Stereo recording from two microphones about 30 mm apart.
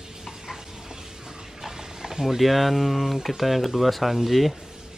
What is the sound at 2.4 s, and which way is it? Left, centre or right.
Speech, centre.